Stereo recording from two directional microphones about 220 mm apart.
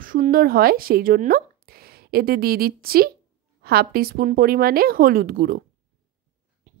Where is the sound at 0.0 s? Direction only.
40° right (ahead or behind).